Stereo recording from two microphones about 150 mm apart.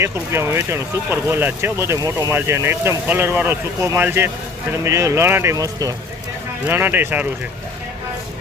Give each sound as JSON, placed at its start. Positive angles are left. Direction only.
{"t": 0.0, "sound": "speech", "side_deg": -15}